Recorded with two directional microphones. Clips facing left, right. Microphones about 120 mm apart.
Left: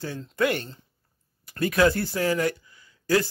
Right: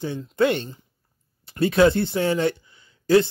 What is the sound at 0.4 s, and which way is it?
Speech, 25° right (ahead or behind).